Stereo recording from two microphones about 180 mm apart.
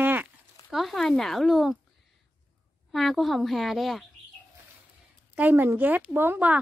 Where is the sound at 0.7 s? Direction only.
Centre (ahead or behind).